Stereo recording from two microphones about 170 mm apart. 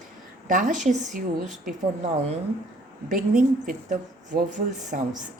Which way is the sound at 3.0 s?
50° right (ahead or behind).